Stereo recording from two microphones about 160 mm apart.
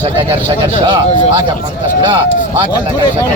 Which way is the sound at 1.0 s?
40° left (ahead or behind).